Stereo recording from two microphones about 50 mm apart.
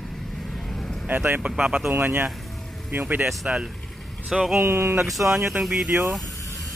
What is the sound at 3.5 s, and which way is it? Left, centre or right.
Speech, right.